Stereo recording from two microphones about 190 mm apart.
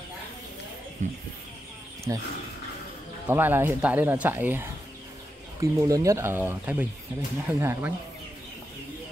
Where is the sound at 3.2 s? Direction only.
10° right (ahead or behind).